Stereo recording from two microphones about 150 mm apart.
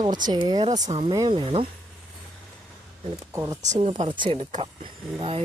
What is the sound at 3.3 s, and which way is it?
Speech, 20° right (ahead or behind).